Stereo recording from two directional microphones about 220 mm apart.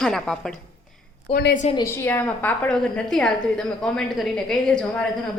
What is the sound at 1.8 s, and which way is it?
A woman's voice, 10° left (ahead or behind).